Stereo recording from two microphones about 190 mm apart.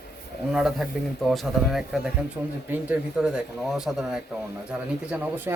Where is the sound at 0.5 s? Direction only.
Centre (ahead or behind).